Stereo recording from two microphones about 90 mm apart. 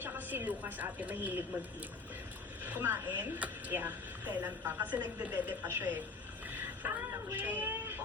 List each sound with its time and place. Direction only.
0.0 s a woman's voice: 20° right (ahead or behind)
2.6 s speech: 20° right (ahead or behind)